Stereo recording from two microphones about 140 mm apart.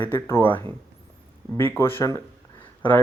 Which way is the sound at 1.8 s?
20° left (ahead or behind).